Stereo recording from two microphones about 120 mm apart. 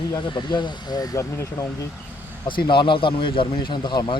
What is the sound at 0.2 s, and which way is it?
Speech, 40° left (ahead or behind).